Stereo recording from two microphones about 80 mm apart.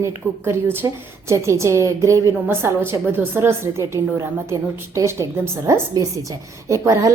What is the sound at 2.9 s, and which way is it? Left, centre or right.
A woman's voice, right.